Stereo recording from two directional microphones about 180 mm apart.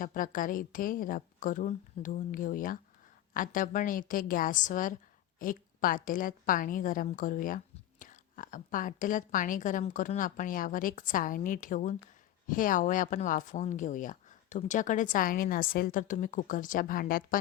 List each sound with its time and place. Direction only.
0.0 s a woman's voice: 50° left (ahead or behind)